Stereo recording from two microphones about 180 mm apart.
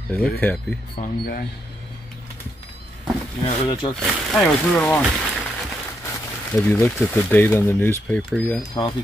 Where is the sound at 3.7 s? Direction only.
25° left (ahead or behind).